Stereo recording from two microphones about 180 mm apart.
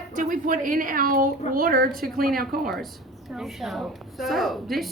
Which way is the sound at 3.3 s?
Centre (ahead or behind).